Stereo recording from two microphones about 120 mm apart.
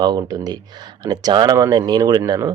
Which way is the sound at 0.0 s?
35° right (ahead or behind).